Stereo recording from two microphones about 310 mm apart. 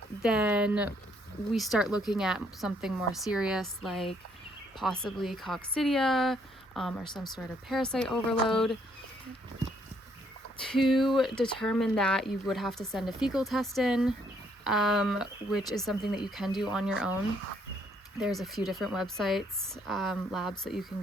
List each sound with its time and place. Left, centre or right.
0.2 s speech: centre
7.0 s speech: centre
7.3 s speech: centre
10.6 s speech: centre
18.2 s speech: centre